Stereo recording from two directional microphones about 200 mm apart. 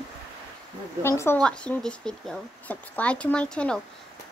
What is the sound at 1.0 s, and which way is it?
Speech, 10° left (ahead or behind).